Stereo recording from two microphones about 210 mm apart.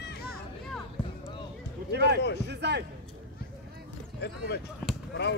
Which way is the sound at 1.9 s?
50° right (ahead or behind).